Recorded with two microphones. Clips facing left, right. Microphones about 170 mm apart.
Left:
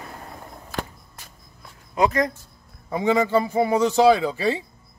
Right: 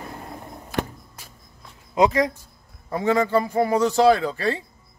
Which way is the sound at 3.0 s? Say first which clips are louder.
Even; centre (ahead or behind).